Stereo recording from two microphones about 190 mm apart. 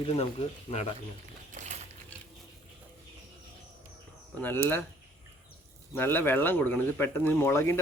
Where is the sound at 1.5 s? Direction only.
40° right (ahead or behind).